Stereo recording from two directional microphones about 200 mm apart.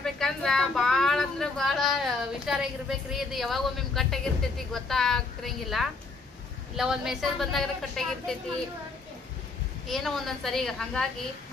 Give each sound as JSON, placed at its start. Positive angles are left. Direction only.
{"t": 0.0, "sound": "a sound", "side_deg": 0}
{"t": 3.1, "sound": "a woman's voice", "side_deg": 0}
{"t": 9.8, "sound": "a woman's voice", "side_deg": 0}